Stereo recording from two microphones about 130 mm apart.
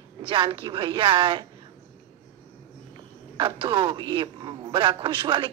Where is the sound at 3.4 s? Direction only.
35° right (ahead or behind).